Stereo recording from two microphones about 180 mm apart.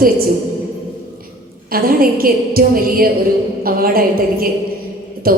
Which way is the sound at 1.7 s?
55° right (ahead or behind).